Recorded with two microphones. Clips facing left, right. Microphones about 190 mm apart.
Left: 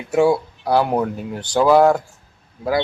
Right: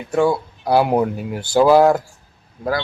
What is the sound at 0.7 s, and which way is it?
Speech, 10° right (ahead or behind).